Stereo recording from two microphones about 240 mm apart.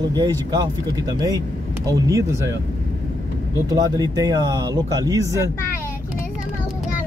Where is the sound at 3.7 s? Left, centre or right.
Centre.